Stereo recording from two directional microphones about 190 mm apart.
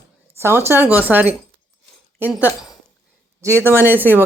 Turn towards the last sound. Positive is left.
turn(degrees=-10)  # may be behind; listen again after turning